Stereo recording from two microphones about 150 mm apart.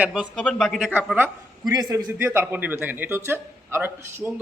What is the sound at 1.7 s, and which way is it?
A man's voice, 25° right (ahead or behind).